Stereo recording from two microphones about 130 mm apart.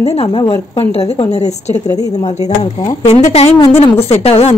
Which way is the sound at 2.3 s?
60° left (ahead or behind).